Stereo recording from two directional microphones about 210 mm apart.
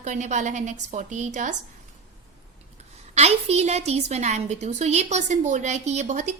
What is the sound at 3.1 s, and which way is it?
A woman's voice, 30° right (ahead or behind).